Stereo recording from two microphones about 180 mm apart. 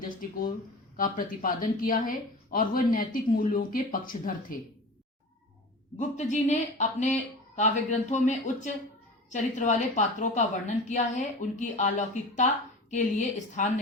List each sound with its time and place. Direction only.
0.0 s speech: 50° left (ahead or behind)
6.0 s speech: 40° left (ahead or behind)